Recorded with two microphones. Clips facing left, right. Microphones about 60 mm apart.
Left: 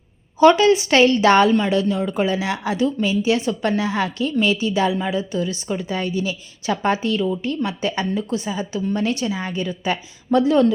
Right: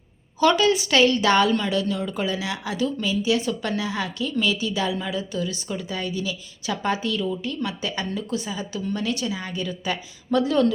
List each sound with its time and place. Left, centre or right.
0.3 s a woman's voice: left